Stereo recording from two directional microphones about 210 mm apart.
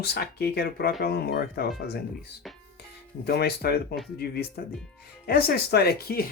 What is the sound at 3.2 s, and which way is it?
Speech, 50° left (ahead or behind).